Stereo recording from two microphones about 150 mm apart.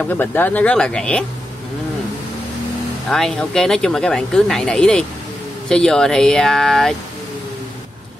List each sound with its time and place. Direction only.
0.0 s speech: 10° left (ahead or behind)
3.1 s speech: 5° left (ahead or behind)